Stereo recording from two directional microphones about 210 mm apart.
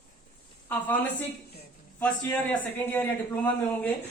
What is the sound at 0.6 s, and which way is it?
A woman's voice, 10° left (ahead or behind).